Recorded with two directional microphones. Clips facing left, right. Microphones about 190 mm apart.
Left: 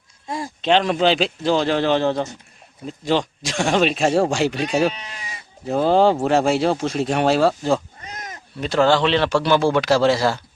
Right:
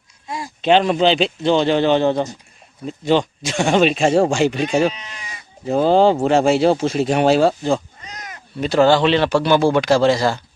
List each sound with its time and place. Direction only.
0.3 s speech: 50° left (ahead or behind)
0.6 s speech: 5° right (ahead or behind)